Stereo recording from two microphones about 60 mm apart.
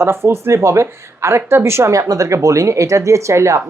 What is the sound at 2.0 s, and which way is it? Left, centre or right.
Speech, right.